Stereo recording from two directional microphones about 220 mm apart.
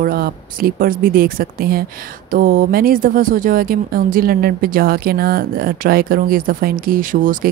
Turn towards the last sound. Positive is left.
turn(degrees=-40)  # may be behind; listen again after turning